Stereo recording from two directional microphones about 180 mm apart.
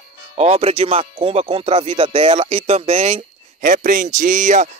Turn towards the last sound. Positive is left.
turn(degrees=-40)  # may be behind; listen again after turning